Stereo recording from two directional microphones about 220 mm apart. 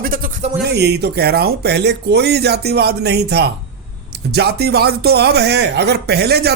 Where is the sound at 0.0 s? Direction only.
40° right (ahead or behind).